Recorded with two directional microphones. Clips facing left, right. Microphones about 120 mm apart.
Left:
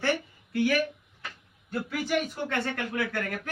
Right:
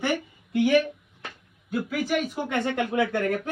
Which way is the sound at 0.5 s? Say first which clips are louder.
Right 5 dB; 20° right (ahead or behind).